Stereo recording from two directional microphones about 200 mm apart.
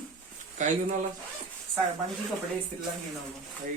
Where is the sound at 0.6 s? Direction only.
40° right (ahead or behind).